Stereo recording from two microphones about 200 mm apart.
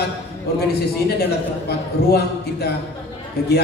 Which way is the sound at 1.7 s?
50° left (ahead or behind).